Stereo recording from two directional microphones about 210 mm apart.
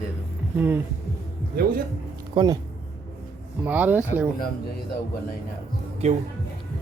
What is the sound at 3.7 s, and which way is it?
Speech, 10° right (ahead or behind).